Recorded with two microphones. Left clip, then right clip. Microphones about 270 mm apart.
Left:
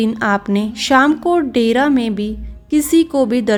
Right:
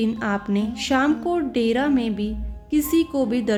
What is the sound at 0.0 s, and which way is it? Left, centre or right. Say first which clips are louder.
A woman's voice: left 8 dB; left.